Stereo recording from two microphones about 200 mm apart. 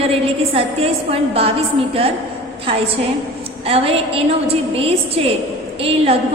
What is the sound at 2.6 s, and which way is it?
A woman's voice, 30° right (ahead or behind).